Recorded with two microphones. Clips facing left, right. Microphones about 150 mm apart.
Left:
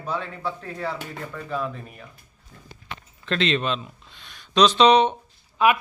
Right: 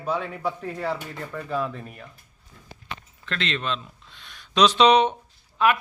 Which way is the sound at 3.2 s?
20° left (ahead or behind).